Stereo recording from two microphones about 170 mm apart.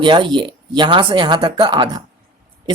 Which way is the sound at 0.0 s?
25° right (ahead or behind).